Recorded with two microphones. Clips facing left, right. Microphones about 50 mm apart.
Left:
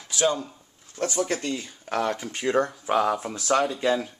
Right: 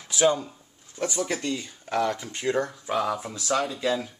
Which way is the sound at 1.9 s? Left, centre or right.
Left.